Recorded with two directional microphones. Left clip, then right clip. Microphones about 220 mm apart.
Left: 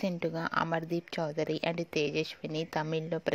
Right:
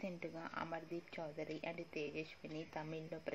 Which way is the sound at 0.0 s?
45° left (ahead or behind).